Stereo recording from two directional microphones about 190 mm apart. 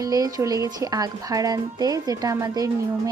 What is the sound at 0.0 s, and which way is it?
Speech, 20° right (ahead or behind).